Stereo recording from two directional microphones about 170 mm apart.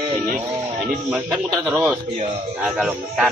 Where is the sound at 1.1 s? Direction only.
10° right (ahead or behind).